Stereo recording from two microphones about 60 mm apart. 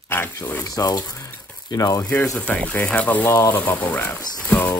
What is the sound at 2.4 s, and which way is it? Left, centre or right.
Speech, centre.